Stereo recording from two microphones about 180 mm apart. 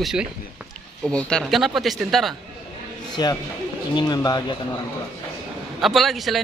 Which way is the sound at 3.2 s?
25° left (ahead or behind).